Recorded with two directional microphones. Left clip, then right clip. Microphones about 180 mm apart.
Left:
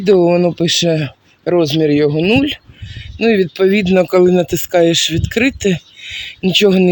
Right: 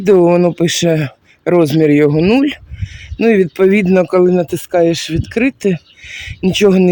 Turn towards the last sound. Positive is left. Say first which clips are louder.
# even
turn(degrees=-15)  # may be behind; listen again after turning